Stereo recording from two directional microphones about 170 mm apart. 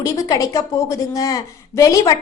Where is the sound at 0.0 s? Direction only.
20° left (ahead or behind).